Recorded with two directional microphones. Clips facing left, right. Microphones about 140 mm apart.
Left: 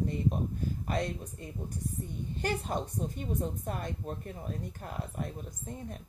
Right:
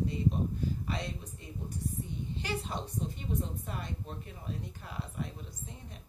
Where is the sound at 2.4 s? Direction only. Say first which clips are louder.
Left 6 dB; 50° left (ahead or behind).